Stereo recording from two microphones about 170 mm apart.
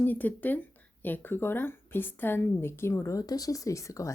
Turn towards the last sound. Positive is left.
turn(degrees=20)  # may be behind; listen again after turning